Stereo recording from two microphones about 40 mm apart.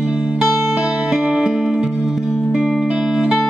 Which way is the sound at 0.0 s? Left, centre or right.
Right.